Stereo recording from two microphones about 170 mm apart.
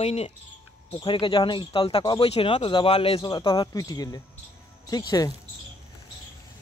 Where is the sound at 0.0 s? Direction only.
35° left (ahead or behind).